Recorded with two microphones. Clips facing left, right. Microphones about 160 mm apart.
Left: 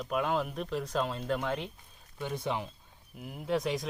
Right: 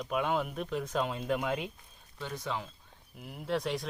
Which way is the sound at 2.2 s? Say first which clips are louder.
Left 3 dB; 20° left (ahead or behind).